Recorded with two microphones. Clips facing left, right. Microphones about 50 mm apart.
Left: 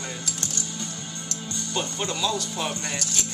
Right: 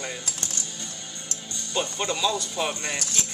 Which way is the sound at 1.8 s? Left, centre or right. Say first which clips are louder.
Right 2 dB; centre.